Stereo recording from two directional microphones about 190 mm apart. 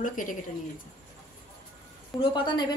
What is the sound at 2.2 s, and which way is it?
Speech, 25° left (ahead or behind).